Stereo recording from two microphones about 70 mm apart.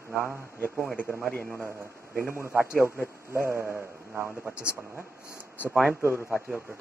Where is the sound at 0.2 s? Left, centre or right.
Left.